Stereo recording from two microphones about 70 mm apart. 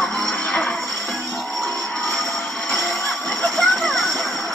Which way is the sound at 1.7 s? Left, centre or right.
Centre.